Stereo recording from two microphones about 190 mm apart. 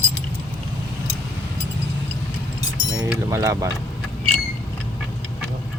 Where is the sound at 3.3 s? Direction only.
15° right (ahead or behind).